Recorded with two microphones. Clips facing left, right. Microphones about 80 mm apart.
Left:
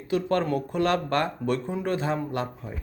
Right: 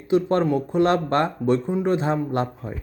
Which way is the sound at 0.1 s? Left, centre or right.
Right.